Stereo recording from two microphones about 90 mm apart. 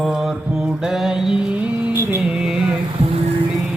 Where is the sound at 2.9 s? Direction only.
85° right.